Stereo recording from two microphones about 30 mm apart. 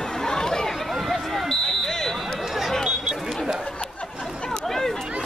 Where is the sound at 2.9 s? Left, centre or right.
Right.